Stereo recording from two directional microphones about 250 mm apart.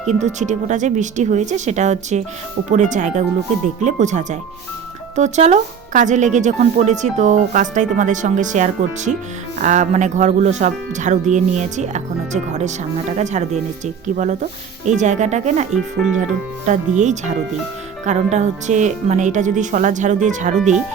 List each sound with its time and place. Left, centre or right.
0.1 s speech: right
16.6 s speech: right